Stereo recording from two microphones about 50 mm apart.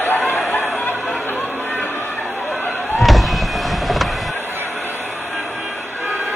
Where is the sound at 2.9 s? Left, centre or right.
Centre.